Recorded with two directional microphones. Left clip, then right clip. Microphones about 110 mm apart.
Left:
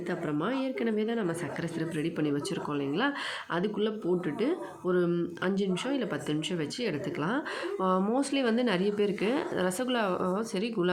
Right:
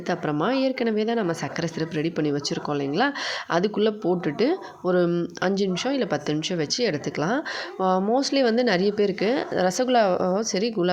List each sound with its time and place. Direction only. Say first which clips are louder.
0.1 s speech: right 8 dB; 65° right (ahead or behind)
2.0 s speech: right 6 dB; 45° right (ahead or behind)
3.5 s a woman's voice: right 9 dB; 60° right (ahead or behind); by 10.9 s 35° right (ahead or behind)